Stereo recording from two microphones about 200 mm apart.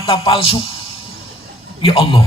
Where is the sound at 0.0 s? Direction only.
25° left (ahead or behind).